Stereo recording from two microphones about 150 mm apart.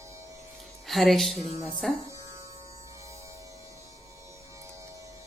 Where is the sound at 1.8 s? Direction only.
5° left (ahead or behind).